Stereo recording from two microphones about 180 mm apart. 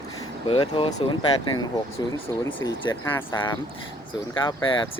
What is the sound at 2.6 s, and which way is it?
Speech, 25° left (ahead or behind).